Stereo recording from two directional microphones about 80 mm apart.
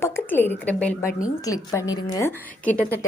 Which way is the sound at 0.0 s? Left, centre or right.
Left.